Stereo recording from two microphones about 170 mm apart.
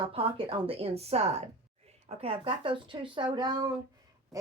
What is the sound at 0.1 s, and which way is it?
A woman's voice, 30° right (ahead or behind).